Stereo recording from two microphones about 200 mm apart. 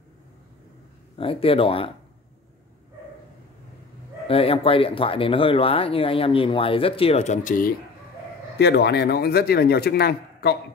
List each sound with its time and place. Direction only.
1.1 s speech: 25° left (ahead or behind)
4.3 s speech: 30° left (ahead or behind)
8.5 s speech: 55° left (ahead or behind)